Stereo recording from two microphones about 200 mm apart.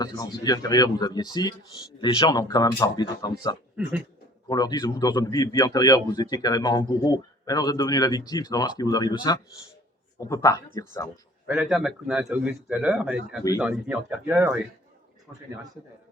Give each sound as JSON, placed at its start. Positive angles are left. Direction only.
{"t": 0.0, "sound": "a man's voice", "side_deg": 20}
{"t": 4.4, "sound": "a man's voice", "side_deg": 20}
{"t": 11.4, "sound": "a man's voice", "side_deg": -5}